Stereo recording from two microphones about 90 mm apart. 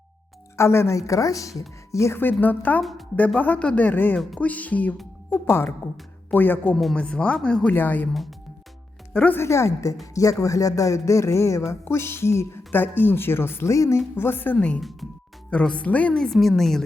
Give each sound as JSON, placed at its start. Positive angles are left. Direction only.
{"t": 0.5, "sound": "a woman's voice", "side_deg": 30}
{"t": 7.7, "sound": "a woman's voice", "side_deg": 20}
{"t": 9.1, "sound": "speech", "side_deg": 15}
{"t": 9.4, "sound": "a woman's voice", "side_deg": 35}
{"t": 14.2, "sound": "a woman's voice", "side_deg": 25}
{"t": 16.1, "sound": "a woman's voice", "side_deg": 5}